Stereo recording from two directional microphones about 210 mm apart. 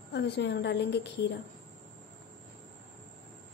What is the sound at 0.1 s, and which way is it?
A woman's voice, 55° left (ahead or behind).